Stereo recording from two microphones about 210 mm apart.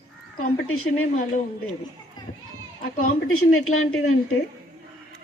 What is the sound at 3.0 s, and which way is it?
A woman's voice, 90° left.